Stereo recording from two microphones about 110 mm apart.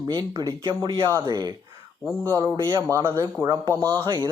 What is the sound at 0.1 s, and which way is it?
Speech, 35° right (ahead or behind).